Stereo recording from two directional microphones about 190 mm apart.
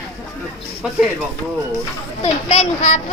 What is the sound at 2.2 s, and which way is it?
Speech, 35° left (ahead or behind).